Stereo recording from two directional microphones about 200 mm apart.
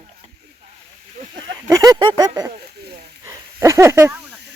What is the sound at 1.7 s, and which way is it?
Speech, 20° right (ahead or behind).